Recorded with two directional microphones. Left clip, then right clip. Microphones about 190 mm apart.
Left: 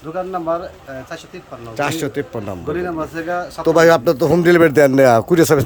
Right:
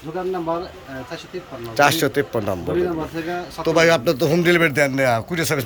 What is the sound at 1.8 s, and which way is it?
Speech, 10° left (ahead or behind).